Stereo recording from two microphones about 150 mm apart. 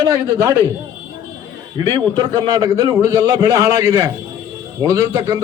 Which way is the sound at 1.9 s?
30° right (ahead or behind).